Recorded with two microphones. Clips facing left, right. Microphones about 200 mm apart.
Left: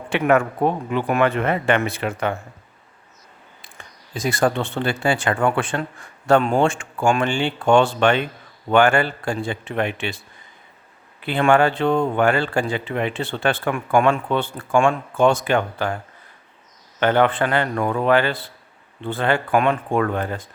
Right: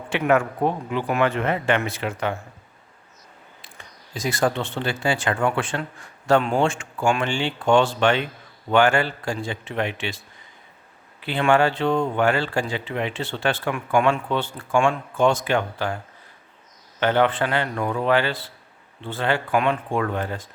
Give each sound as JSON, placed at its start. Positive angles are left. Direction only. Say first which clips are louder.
{"t": 0.1, "sound": "speech", "louder": "left 2 dB", "side_deg": 60}
{"t": 4.2, "sound": "speech", "louder": "left 3 dB", "side_deg": 55}
{"t": 11.3, "sound": "speech", "louder": "left 2 dB", "side_deg": 50}
{"t": 17.0, "sound": "speech", "louder": "left 2 dB", "side_deg": 55}